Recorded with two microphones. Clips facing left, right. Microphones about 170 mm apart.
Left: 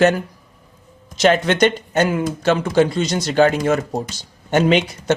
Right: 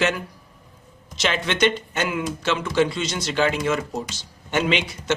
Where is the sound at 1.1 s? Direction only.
45° left (ahead or behind).